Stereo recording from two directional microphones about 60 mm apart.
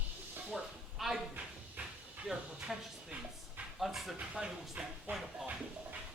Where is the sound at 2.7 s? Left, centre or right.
Centre.